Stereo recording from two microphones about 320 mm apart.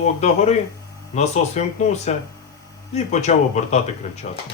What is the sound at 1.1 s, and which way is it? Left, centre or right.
Speech, left.